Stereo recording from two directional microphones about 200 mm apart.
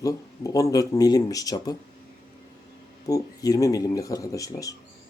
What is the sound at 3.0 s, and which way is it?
Speech, 15° left (ahead or behind).